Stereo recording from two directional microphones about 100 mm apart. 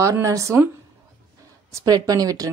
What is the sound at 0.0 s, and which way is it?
Speech, 30° right (ahead or behind).